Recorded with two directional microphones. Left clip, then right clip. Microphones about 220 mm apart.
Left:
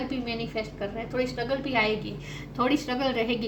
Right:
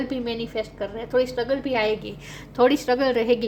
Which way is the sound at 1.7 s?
55° right (ahead or behind).